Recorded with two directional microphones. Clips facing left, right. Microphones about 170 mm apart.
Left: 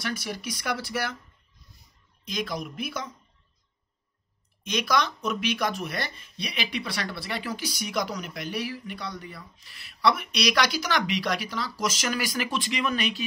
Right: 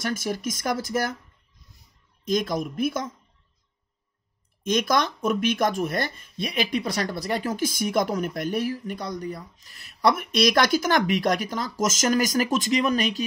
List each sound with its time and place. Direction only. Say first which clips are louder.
0.0 s speech: right 5 dB; 45° right (ahead or behind)
2.2 s speech: right 7 dB; 45° right (ahead or behind)
4.6 s speech: right 3 dB; 50° right (ahead or behind)